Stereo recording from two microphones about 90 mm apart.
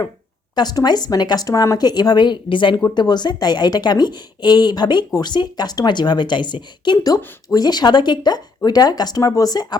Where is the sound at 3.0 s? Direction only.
55° left (ahead or behind).